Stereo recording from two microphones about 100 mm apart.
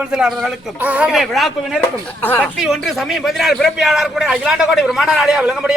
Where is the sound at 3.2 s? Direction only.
Centre (ahead or behind).